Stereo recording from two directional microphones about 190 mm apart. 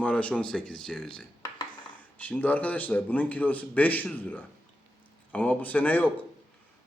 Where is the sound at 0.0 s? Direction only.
5° left (ahead or behind).